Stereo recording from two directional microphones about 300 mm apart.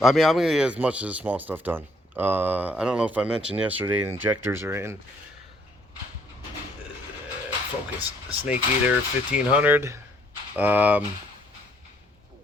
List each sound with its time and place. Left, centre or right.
0.0 s speech: centre
8.3 s speech: centre